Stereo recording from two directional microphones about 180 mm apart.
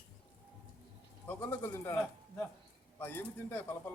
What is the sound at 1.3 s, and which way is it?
Speech, 10° left (ahead or behind).